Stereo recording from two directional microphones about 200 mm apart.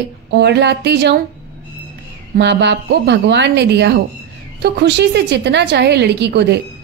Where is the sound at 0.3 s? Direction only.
60° right (ahead or behind).